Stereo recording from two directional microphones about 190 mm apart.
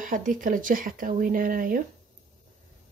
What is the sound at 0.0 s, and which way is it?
A woman's voice, 45° right (ahead or behind).